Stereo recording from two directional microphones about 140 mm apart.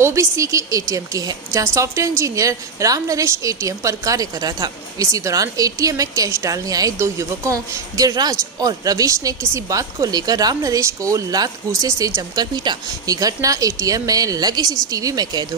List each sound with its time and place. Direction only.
0.0 s a woman's voice: 20° right (ahead or behind)